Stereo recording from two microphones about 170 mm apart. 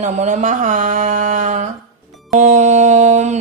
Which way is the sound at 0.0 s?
45° right (ahead or behind).